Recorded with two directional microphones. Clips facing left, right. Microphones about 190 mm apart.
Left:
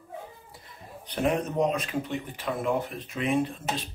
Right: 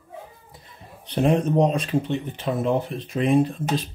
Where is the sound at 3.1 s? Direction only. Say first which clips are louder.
Right 7 dB; 35° right (ahead or behind).